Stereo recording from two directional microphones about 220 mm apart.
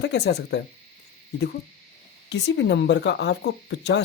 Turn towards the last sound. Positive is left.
turn(degrees=50)  # may be behind; listen again after turning